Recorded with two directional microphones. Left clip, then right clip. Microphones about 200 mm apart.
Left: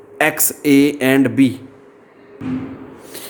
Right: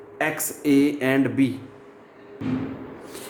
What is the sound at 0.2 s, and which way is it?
Speech, 40° left (ahead or behind).